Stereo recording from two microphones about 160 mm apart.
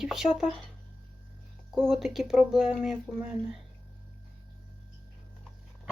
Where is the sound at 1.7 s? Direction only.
Centre (ahead or behind).